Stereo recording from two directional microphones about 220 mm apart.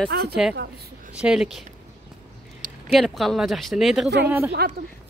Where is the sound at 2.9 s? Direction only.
Centre (ahead or behind).